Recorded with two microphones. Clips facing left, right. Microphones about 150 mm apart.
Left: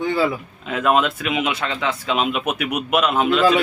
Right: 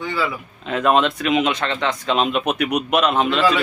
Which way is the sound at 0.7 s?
5° left (ahead or behind).